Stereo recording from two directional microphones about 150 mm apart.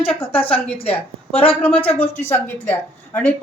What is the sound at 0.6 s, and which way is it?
Speech, 40° left (ahead or behind).